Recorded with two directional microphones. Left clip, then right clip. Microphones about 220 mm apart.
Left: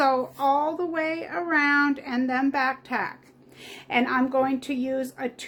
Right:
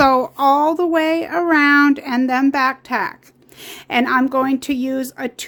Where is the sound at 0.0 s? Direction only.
50° right (ahead or behind).